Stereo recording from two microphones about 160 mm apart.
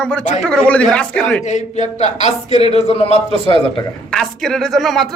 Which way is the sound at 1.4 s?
45° left (ahead or behind).